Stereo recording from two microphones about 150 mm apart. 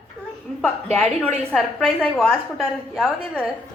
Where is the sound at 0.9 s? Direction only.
5° left (ahead or behind).